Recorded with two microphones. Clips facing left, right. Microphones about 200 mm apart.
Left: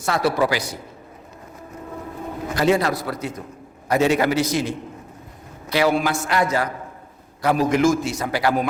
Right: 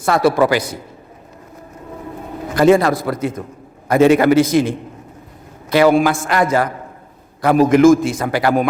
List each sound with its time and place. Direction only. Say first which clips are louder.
0.0 s a man's voice: right 6 dB; 55° right (ahead or behind)
2.6 s a man's voice: right 7 dB; 50° right (ahead or behind)
5.7 s a man's voice: right 7 dB; 50° right (ahead or behind)